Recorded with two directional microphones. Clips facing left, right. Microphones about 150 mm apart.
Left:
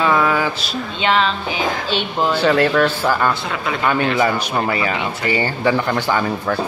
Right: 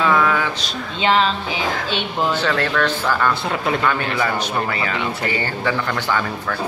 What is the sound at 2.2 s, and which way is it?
Speech, 10° left (ahead or behind).